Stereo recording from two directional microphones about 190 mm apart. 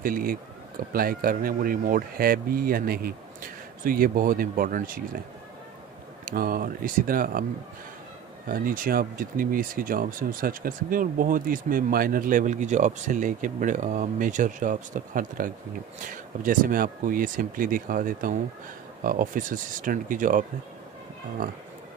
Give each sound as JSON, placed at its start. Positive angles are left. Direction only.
{"t": 0.0, "sound": "speech", "side_deg": -50}
{"t": 6.2, "sound": "speech", "side_deg": -50}
{"t": 8.5, "sound": "speech", "side_deg": -50}